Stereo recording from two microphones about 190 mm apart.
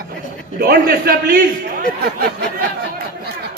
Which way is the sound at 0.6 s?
55° right (ahead or behind).